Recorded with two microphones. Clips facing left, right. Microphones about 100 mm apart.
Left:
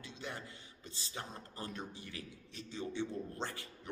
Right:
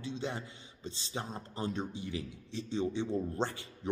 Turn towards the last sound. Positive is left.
turn(degrees=-25)  # may be behind; listen again after turning